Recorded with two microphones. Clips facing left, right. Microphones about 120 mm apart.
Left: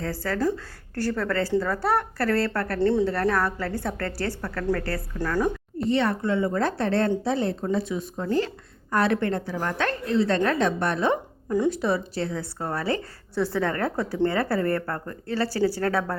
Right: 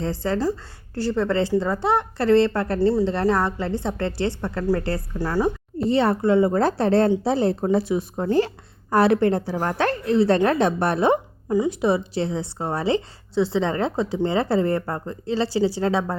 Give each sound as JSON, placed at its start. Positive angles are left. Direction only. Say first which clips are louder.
{"t": 0.0, "sound": "a woman's voice", "louder": "right 2 dB", "side_deg": -25}
{"t": 2.7, "sound": "a woman's voice", "louder": "right 1 dB", "side_deg": -10}
{"t": 3.1, "sound": "a woman's voice", "louder": "right 3 dB", "side_deg": -25}